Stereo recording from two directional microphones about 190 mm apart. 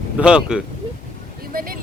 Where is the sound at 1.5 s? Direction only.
50° right (ahead or behind).